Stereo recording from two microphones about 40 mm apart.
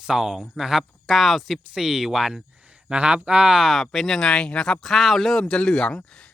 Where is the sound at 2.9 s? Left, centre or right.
Right.